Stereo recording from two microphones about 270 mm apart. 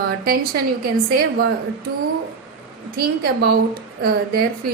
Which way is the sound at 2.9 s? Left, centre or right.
Right.